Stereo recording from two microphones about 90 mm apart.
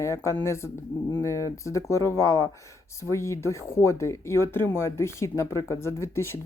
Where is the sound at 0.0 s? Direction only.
35° left (ahead or behind).